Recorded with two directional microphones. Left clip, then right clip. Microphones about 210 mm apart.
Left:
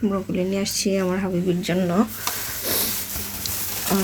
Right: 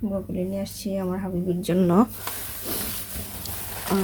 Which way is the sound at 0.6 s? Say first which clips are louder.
Left 7 dB; 5° right (ahead or behind).